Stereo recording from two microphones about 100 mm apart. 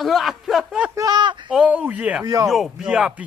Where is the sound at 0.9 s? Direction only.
40° right (ahead or behind).